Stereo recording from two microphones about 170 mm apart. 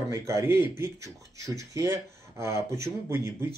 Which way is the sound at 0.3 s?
15° right (ahead or behind).